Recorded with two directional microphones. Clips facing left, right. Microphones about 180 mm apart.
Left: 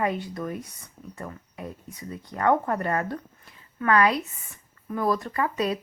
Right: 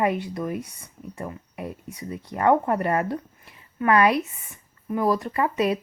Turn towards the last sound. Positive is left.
turn(degrees=-25)  # may be behind; listen again after turning